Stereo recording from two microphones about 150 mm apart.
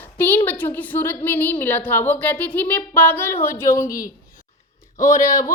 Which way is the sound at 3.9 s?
70° left (ahead or behind).